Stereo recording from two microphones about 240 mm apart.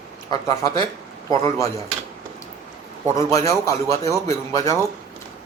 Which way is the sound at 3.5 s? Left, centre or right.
Centre.